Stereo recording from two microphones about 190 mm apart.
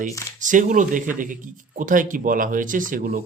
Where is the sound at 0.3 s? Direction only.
45° right (ahead or behind).